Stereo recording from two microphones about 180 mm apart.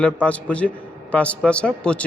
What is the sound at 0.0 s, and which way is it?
A man's voice, 5° left (ahead or behind).